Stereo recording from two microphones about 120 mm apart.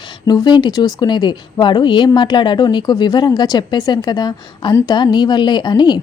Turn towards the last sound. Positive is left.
turn(degrees=40)  # may be behind; listen again after turning